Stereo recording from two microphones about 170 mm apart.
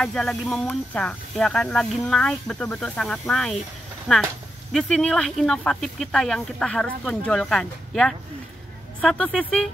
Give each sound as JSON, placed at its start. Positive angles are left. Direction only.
{"t": 0.0, "sound": "speech", "side_deg": 5}